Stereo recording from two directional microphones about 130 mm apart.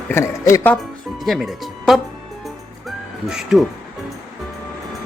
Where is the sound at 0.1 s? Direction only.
25° left (ahead or behind).